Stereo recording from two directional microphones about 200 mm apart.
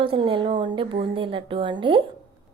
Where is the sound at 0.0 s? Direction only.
25° right (ahead or behind).